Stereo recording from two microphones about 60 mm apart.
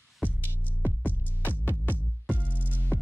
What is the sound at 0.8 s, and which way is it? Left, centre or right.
Music, left.